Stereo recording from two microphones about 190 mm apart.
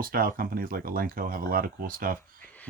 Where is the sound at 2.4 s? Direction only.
10° left (ahead or behind).